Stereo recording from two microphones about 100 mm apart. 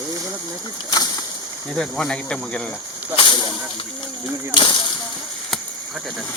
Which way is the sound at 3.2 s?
50° left (ahead or behind).